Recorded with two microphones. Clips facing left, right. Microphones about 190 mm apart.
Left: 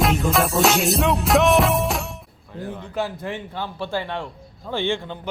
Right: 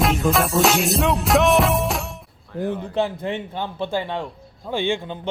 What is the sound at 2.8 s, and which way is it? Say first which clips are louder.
A man's voice: right 4 dB; 25° right (ahead or behind).